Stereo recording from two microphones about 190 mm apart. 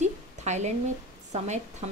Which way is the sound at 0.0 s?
35° right (ahead or behind).